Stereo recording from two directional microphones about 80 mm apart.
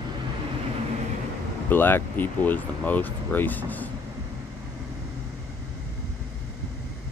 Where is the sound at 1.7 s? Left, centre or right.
Left.